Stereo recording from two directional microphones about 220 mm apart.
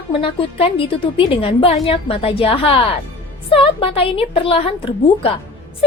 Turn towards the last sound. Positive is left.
turn(degrees=25)  # may be behind; listen again after turning